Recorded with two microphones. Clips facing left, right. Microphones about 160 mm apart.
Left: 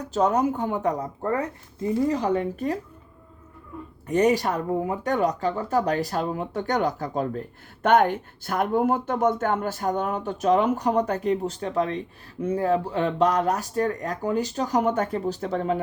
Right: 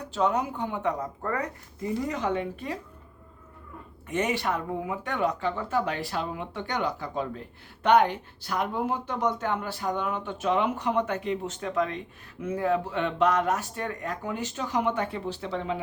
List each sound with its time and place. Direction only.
0.1 s speech: 40° left (ahead or behind)
1.2 s speech: 25° left (ahead or behind); by 2.7 s 45° left (ahead or behind)
4.0 s speech: 40° left (ahead or behind)